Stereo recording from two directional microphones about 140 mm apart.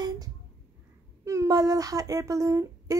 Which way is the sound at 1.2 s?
20° right (ahead or behind).